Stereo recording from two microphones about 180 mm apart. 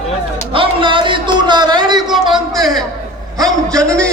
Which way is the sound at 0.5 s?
30° right (ahead or behind).